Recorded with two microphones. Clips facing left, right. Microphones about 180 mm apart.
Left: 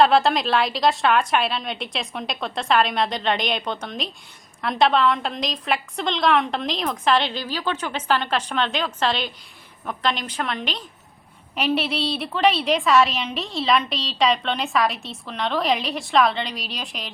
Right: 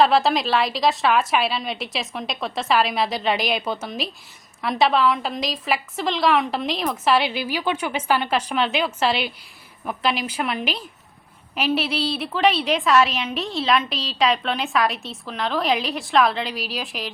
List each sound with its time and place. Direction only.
0.0 s a woman's voice: centre (ahead or behind)